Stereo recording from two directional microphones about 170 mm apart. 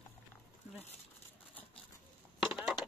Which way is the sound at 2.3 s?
Centre (ahead or behind).